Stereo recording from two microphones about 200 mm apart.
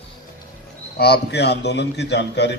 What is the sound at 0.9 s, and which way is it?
A man's voice, 55° left (ahead or behind).